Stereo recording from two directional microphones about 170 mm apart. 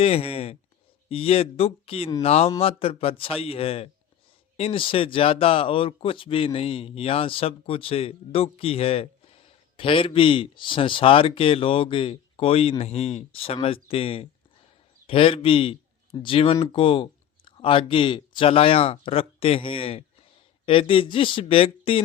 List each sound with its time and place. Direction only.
0.0 s speech: 35° left (ahead or behind)